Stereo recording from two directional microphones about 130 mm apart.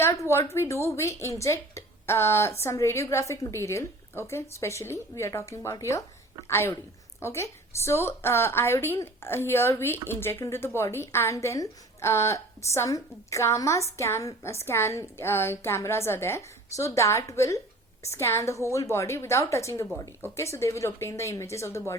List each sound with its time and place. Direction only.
0.0 s a woman's voice: 20° left (ahead or behind)